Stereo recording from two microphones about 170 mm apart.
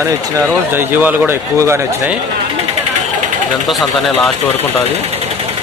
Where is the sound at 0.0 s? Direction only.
15° right (ahead or behind).